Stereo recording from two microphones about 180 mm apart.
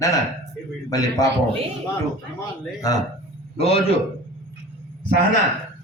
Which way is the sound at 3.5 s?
35° left (ahead or behind).